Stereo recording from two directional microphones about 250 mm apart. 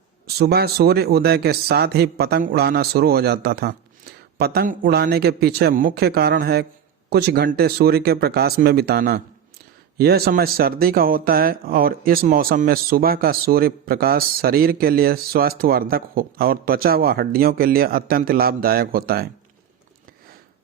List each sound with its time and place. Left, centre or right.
0.3 s speech: right